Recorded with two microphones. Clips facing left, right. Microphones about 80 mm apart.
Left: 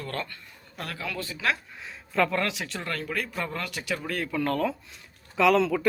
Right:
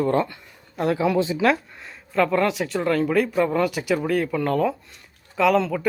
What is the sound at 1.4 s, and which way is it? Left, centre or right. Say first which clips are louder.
Speech: right 8 dB; centre.